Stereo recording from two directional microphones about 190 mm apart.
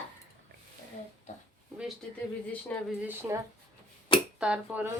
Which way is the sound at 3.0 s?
10° right (ahead or behind).